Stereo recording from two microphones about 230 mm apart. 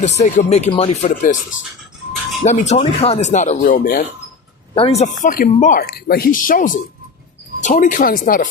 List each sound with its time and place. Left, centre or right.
0.0 s speech: left
2.4 s speech: left
4.7 s speech: left